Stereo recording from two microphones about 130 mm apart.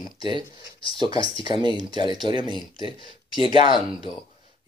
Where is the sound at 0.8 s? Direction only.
45° left (ahead or behind).